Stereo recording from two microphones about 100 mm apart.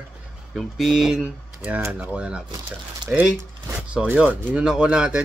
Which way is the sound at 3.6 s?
15° right (ahead or behind).